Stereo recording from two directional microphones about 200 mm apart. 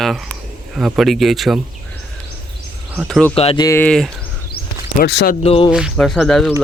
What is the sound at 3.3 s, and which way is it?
Speech, 30° left (ahead or behind).